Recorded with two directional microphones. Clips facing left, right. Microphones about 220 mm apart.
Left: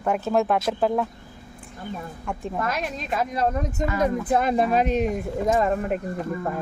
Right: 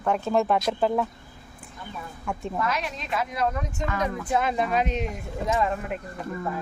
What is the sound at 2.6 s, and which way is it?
Speech, 50° left (ahead or behind).